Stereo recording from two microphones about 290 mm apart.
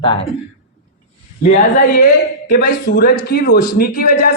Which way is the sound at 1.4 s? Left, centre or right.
Left.